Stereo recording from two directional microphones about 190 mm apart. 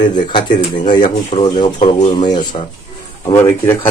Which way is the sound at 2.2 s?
25° left (ahead or behind).